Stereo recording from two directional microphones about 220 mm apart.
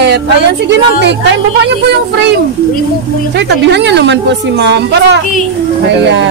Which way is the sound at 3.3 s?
50° right (ahead or behind).